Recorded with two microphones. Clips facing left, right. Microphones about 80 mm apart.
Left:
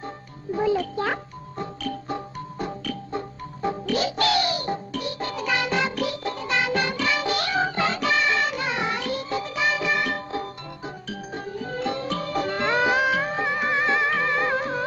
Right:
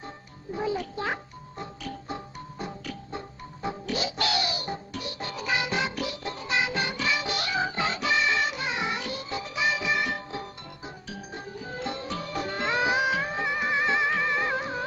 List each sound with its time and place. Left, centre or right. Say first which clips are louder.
0.7 s music: left 6 dB; left